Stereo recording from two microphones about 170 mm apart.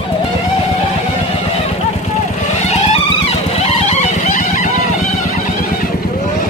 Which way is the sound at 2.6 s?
40° left (ahead or behind).